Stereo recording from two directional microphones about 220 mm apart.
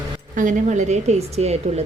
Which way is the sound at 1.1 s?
30° right (ahead or behind).